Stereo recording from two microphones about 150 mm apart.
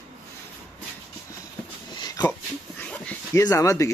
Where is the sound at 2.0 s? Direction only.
25° left (ahead or behind).